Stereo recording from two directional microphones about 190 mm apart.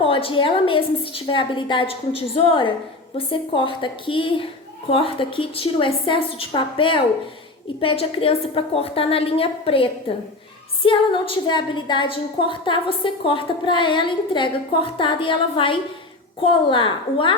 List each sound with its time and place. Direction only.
0.0 s a woman's voice: 30° left (ahead or behind)